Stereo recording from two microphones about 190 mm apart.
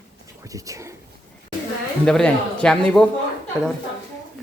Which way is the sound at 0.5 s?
15° right (ahead or behind).